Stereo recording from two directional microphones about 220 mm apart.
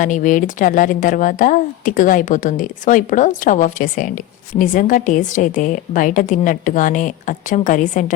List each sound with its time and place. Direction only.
0.0 s a woman's voice: 35° left (ahead or behind)